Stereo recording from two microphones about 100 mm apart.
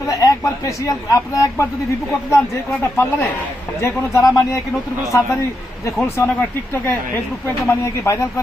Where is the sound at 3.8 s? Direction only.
30° left (ahead or behind).